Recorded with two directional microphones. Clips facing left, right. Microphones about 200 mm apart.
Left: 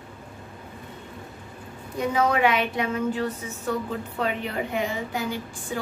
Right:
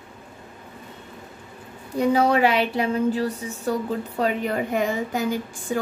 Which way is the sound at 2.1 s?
35° right (ahead or behind).